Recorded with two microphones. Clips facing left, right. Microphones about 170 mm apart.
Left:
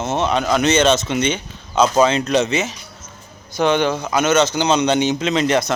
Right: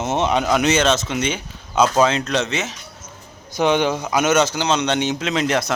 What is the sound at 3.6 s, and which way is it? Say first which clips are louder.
A man's voice: left 1 dB; 15° right (ahead or behind).